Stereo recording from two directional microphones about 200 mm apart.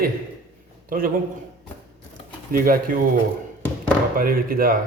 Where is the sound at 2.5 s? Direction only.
45° right (ahead or behind).